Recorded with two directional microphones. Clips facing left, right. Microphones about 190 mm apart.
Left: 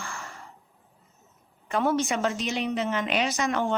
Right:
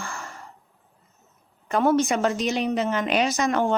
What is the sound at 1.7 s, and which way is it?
A woman's voice, 50° right (ahead or behind).